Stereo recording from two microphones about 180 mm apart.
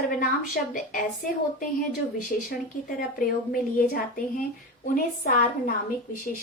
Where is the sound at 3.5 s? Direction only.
55° left (ahead or behind).